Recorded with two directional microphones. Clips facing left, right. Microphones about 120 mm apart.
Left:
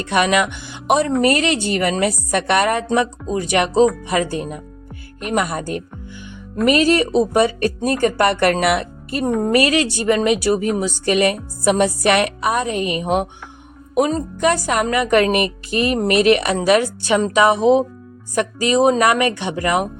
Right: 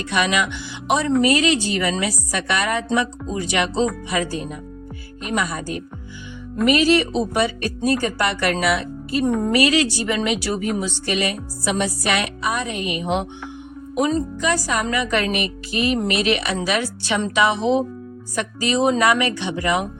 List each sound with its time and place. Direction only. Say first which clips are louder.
0.1 s speech: left 4 dB; 45° left (ahead or behind)
10.1 s music: left 6 dB; 40° left (ahead or behind)
13.9 s speech: left 2 dB; 45° left (ahead or behind)